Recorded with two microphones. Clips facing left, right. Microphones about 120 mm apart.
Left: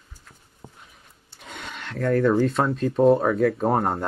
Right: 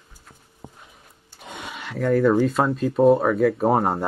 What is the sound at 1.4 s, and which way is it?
Speech, 15° right (ahead or behind).